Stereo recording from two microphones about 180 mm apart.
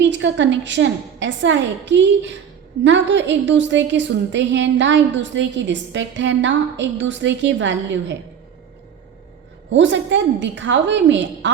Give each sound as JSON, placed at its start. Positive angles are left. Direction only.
{"t": 0.0, "sound": "a woman's voice", "side_deg": -85}
{"t": 9.6, "sound": "a woman's voice", "side_deg": -90}